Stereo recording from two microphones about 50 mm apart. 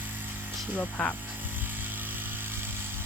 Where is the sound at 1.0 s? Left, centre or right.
Centre.